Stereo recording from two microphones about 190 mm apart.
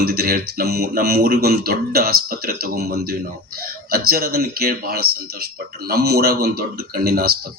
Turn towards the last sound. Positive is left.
turn(degrees=-55)  # may be behind; listen again after turning